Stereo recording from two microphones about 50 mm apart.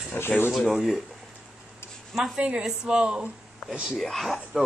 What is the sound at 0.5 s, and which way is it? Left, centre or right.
Speech, centre.